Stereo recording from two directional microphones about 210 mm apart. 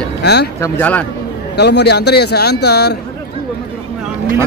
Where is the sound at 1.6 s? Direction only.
50° left (ahead or behind).